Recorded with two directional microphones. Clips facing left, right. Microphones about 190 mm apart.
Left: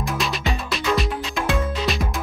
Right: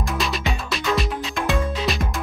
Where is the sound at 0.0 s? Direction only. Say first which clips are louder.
Even; centre (ahead or behind).